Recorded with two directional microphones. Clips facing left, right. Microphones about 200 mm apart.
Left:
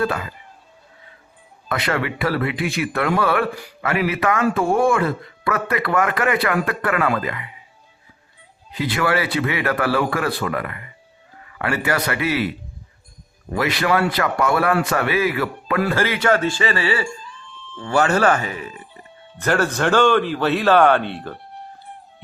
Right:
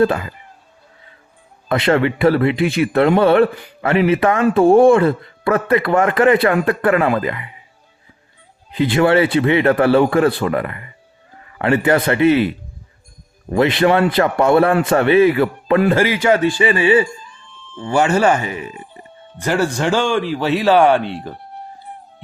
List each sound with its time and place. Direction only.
0.0 s speech: 25° right (ahead or behind)
1.7 s speech: 25° right (ahead or behind)
8.7 s speech: 25° right (ahead or behind)
13.6 s speech: 25° right (ahead or behind)
19.4 s speech: 15° right (ahead or behind)